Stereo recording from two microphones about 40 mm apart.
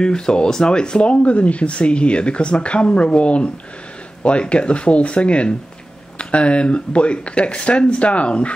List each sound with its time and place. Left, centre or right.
0.0 s speech: left